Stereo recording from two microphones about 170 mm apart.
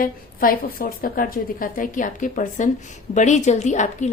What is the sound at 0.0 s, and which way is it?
A woman's voice, 60° left (ahead or behind).